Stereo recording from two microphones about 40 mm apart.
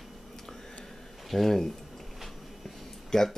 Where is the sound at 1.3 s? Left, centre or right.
Centre.